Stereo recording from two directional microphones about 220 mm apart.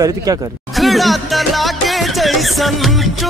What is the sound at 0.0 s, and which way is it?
Speech, 15° right (ahead or behind).